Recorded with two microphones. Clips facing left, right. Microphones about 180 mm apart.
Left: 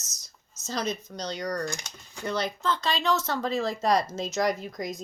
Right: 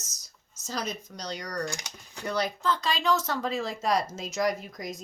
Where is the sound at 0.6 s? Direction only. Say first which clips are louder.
Left 3 dB; 30° left (ahead or behind).